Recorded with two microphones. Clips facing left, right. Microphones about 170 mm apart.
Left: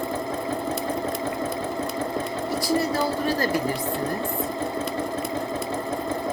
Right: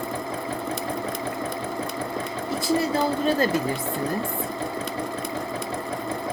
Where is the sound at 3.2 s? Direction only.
25° right (ahead or behind).